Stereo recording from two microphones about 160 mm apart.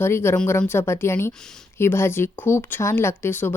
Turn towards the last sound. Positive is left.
turn(degrees=15)  # may be behind; listen again after turning